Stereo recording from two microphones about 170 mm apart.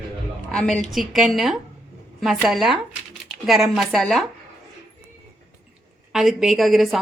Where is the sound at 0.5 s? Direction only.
5° left (ahead or behind).